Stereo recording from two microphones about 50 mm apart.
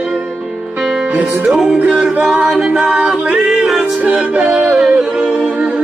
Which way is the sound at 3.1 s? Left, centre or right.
Right.